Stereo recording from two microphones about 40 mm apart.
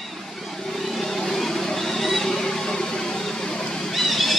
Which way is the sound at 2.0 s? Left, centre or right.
Centre.